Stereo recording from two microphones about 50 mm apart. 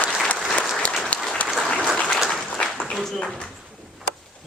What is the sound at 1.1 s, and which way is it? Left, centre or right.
Applause, left.